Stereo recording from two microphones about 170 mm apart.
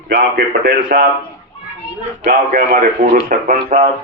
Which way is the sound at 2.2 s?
55° right (ahead or behind).